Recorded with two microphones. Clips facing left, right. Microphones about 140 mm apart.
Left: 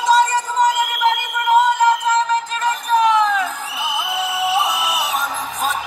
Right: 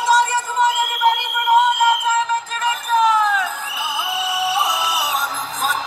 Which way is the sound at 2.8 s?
Centre (ahead or behind).